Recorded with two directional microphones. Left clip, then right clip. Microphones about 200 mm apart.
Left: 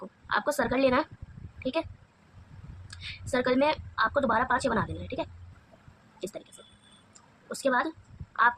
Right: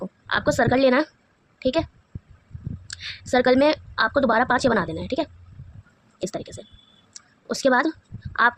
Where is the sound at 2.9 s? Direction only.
35° right (ahead or behind).